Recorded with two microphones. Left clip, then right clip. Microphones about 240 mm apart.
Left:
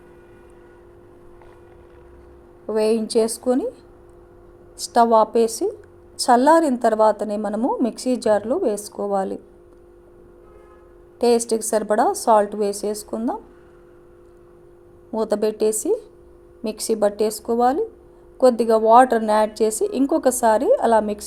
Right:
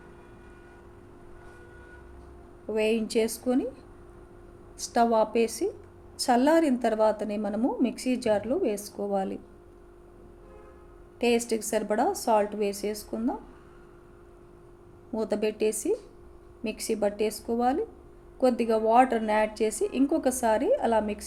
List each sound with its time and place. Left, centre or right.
2.6 s a woman's voice: left
4.9 s a woman's voice: left
11.2 s a woman's voice: left
15.1 s a woman's voice: left